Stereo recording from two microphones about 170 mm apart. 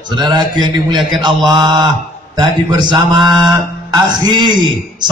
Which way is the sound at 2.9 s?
25° right (ahead or behind).